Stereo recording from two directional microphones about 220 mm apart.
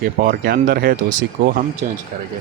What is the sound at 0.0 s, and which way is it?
Speech, 45° right (ahead or behind).